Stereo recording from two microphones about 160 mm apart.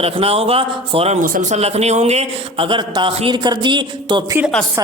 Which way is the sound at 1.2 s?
60° right (ahead or behind).